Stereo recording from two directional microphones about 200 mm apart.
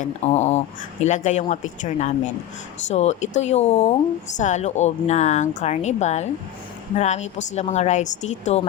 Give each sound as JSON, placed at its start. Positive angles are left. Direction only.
{"t": 0.0, "sound": "speech", "side_deg": 35}